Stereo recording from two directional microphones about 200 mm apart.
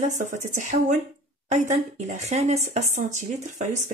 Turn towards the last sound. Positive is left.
turn(degrees=-40)  # may be behind; listen again after turning